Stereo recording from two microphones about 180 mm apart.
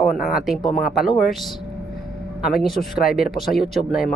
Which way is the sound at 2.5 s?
Centre (ahead or behind).